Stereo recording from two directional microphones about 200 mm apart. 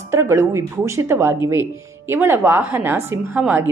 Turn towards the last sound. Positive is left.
turn(degrees=-10)  # may be behind; listen again after turning